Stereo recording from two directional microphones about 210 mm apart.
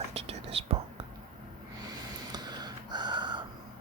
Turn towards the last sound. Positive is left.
turn(degrees=-20)  # may be behind; listen again after turning